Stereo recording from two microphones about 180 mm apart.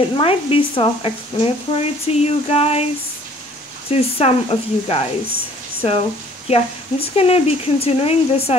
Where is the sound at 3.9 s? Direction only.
35° left (ahead or behind).